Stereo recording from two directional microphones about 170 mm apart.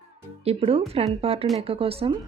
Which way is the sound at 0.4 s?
35° right (ahead or behind).